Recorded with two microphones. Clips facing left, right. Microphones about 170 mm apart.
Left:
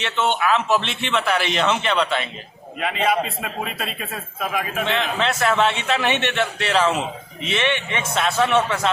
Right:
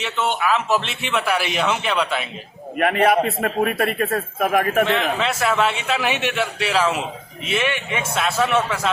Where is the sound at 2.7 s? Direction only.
60° right (ahead or behind).